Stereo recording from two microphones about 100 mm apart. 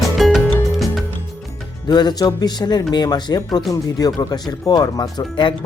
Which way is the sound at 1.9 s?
45° left (ahead or behind).